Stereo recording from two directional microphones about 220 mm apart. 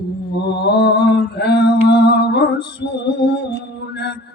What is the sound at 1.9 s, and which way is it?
Music, 50° left (ahead or behind).